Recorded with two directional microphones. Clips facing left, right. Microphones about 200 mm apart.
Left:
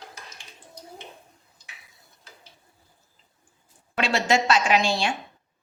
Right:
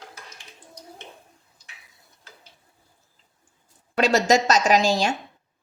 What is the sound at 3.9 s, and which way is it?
A woman's voice, 40° right (ahead or behind).